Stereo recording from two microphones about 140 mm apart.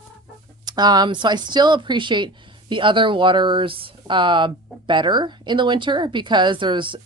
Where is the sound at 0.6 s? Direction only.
30° right (ahead or behind).